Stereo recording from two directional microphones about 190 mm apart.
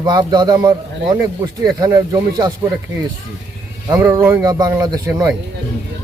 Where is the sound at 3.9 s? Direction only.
20° right (ahead or behind).